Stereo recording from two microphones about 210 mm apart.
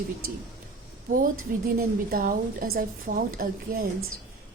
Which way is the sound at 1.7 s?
40° right (ahead or behind).